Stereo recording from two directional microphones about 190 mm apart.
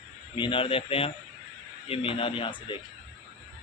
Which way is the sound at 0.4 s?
25° left (ahead or behind).